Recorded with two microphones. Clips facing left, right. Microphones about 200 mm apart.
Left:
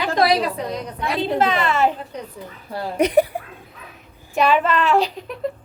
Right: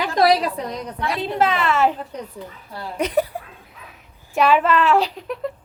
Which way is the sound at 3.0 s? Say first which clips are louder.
Left 4 dB; 15° left (ahead or behind).